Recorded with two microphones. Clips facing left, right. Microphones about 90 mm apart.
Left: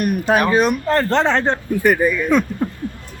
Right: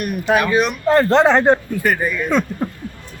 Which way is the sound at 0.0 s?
40° left (ahead or behind).